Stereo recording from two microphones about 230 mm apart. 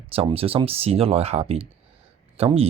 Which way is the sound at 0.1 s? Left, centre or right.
Right.